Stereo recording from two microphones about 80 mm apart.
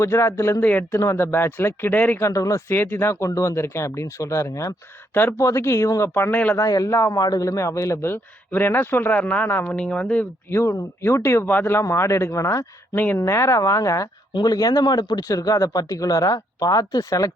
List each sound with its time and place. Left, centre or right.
0.0 s a man's voice: left
0.6 s speech: left
0.9 s a man's voice: left
1.2 s speech: left
2.2 s speech: left
2.6 s a man's voice: left
6.3 s speech: left
6.6 s a man's voice: left
9.7 s speech: centre
10.5 s a man's voice: left
14.3 s speech: left
15.3 s speech: left